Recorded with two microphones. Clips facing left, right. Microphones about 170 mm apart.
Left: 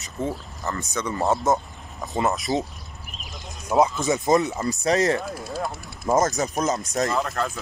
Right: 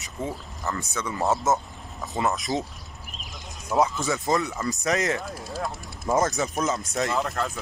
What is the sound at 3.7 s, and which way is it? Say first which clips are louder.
A man's voice: left 3 dB; 20° left (ahead or behind).